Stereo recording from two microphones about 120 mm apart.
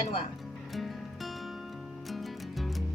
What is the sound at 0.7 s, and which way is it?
Music, centre (ahead or behind).